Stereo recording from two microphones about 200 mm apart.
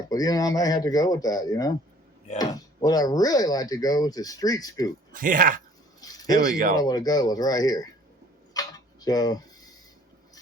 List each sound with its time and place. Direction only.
0.1 s speech: 20° left (ahead or behind)
5.1 s speech: 45° right (ahead or behind)
6.0 s a sound: 20° left (ahead or behind)
6.3 s speech: 45° right (ahead or behind)
6.7 s speech: 20° left (ahead or behind)
8.5 s tick-tock: 20° left (ahead or behind)